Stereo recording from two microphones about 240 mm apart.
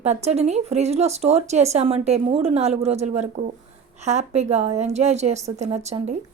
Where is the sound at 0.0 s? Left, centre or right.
Right.